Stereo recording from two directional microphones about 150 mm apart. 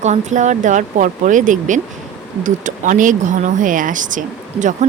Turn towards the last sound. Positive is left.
turn(degrees=-60)  # may be behind; listen again after turning